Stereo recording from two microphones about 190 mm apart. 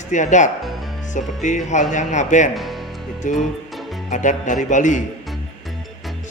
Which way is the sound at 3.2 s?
40° left (ahead or behind).